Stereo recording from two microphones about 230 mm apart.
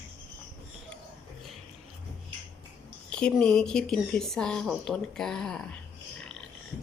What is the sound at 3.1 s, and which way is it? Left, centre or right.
A woman's voice, centre.